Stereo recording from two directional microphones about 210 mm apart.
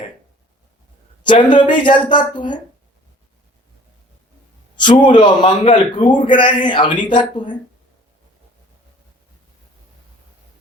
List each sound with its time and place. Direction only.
1.2 s a man's voice: 20° left (ahead or behind)
4.8 s a man's voice: 20° left (ahead or behind)